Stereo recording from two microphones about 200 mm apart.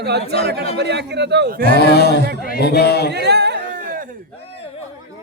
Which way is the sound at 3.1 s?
55° right (ahead or behind).